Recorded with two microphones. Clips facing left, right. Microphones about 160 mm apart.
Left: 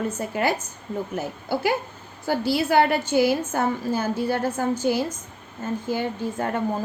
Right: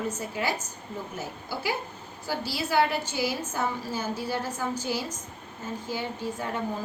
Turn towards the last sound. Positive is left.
turn(degrees=55)  # may be behind; listen again after turning